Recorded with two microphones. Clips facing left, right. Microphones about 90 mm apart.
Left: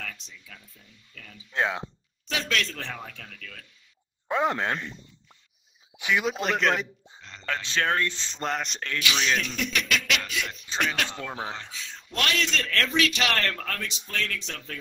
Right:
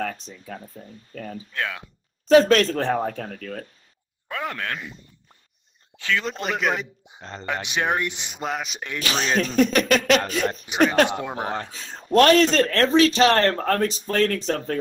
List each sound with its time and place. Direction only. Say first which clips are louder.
0.0 s speech: right 12 dB; 40° right (ahead or behind)
1.5 s speech: left 4 dB; 20° left (ahead or behind)
2.2 s speech: right 15 dB; 40° right (ahead or behind)
4.3 s speech: left 4 dB; 20° left (ahead or behind)
4.7 s a man's voice: even; 5° right (ahead or behind)
5.9 s speech: right 1 dB; 15° left (ahead or behind)
6.2 s a man's voice: even; centre (ahead or behind)
7.2 s speech: right 11 dB; 40° right (ahead or behind)
7.4 s speech: right 2 dB; 15° right (ahead or behind)
8.4 s a man's voice: right 1 dB; 5° right (ahead or behind)
9.0 s speech: right 4 dB; 40° right (ahead or behind)
11.1 s speech: right 7 dB; 20° right (ahead or behind)
11.4 s speech: right 7 dB; 45° right (ahead or behind)